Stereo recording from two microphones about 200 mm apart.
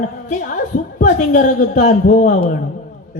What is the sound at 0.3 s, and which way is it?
A woman's voice, 40° left (ahead or behind).